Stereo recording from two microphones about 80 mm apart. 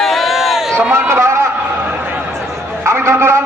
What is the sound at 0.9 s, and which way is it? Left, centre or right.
Speech, right.